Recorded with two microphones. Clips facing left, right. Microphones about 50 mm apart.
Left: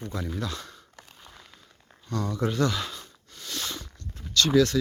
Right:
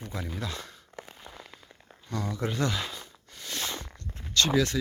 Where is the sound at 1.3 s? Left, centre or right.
Centre; by 3.9 s right.